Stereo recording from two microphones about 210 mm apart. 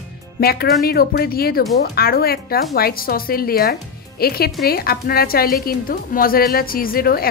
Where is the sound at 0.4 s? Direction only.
45° left (ahead or behind).